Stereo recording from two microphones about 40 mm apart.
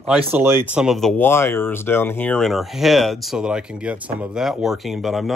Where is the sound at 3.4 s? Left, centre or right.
Right.